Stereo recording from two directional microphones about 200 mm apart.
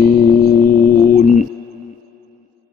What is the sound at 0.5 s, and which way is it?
Music, 45° left (ahead or behind).